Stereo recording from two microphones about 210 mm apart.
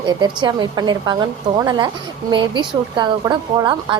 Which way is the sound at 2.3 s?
20° right (ahead or behind).